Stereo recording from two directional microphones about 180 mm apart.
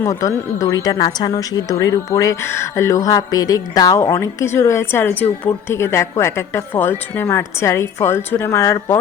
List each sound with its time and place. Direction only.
0.0 s speech: 15° left (ahead or behind)